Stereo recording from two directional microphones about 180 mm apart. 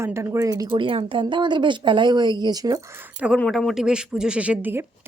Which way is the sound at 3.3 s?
5° left (ahead or behind).